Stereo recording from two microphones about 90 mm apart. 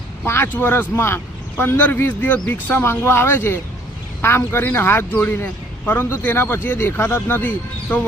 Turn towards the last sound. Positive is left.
turn(degrees=20)  # may be behind; listen again after turning